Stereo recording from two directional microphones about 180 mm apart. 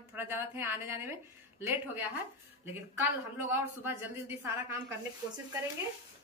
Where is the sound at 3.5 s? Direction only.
10° right (ahead or behind).